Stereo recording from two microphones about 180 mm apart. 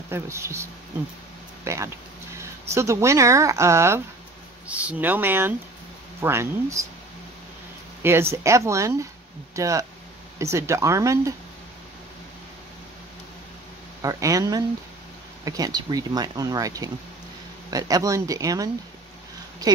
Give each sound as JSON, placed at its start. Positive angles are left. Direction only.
{"t": 0.1, "sound": "speech", "side_deg": -15}
{"t": 8.0, "sound": "speech", "side_deg": -15}
{"t": 14.0, "sound": "speech", "side_deg": -20}